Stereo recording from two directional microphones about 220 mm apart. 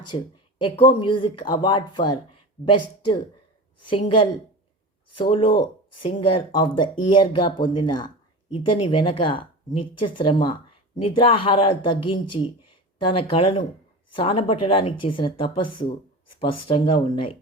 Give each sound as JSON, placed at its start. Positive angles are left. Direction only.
{"t": 0.1, "sound": "speech", "side_deg": 20}
{"t": 3.8, "sound": "speech", "side_deg": 25}
{"t": 5.3, "sound": "speech", "side_deg": 20}